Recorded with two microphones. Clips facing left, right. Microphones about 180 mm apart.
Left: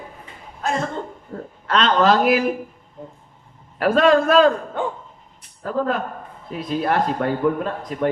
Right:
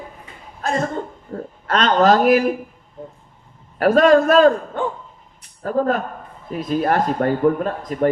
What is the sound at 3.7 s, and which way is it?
Speech, 45° right (ahead or behind).